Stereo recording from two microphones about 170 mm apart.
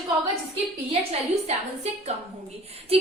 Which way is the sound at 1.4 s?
40° right (ahead or behind).